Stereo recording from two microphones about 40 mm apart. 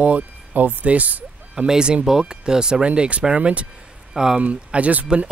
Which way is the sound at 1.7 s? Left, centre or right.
Right.